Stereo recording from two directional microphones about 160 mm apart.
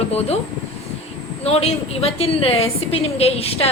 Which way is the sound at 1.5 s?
40° left (ahead or behind).